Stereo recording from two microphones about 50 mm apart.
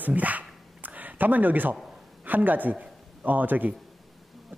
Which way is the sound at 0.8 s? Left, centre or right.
Right.